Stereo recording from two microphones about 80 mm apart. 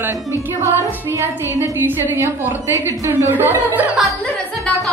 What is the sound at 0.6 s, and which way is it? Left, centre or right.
A woman's voice, right.